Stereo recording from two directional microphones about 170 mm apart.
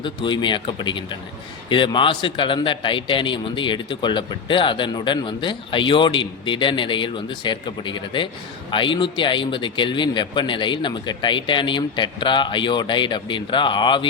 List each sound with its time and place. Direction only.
0.0 s a man's voice: 30° left (ahead or behind)